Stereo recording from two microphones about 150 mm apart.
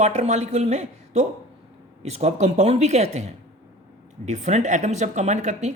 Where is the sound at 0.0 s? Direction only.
50° right (ahead or behind).